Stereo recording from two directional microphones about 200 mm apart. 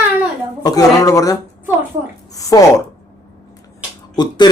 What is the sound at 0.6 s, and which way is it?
Speech, 20° left (ahead or behind).